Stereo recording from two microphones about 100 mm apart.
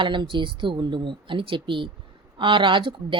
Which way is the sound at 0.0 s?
50° right (ahead or behind).